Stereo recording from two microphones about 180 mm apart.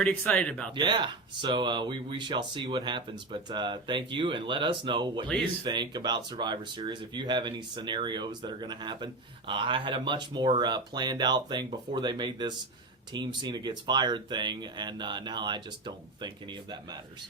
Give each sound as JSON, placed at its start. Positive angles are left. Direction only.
{"t": 0.0, "sound": "speech", "side_deg": 5}
{"t": 0.8, "sound": "speech", "side_deg": -25}